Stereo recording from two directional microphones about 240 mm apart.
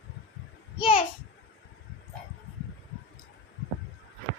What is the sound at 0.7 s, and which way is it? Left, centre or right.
Speech, left.